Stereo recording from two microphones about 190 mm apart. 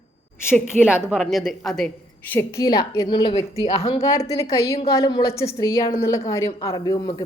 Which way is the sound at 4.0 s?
15° left (ahead or behind).